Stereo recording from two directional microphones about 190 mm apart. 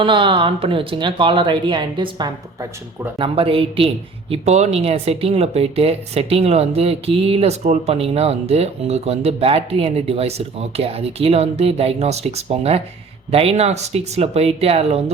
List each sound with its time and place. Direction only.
0.0 s speech: 25° right (ahead or behind)
3.2 s speech: 30° right (ahead or behind)